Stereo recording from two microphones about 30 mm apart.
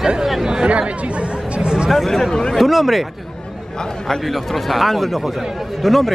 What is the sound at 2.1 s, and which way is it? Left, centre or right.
Speech, centre.